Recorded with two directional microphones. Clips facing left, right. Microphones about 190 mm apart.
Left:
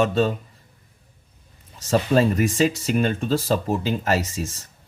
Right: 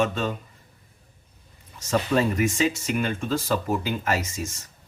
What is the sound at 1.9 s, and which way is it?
Speech, 35° left (ahead or behind).